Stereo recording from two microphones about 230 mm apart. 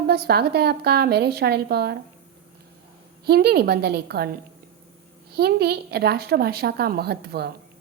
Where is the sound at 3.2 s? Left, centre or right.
Right.